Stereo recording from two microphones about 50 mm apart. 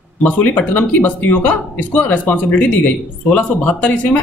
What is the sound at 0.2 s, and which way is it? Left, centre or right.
A man's voice, left.